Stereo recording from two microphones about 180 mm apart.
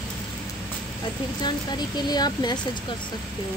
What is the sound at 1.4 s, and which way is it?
Speech, 25° left (ahead or behind).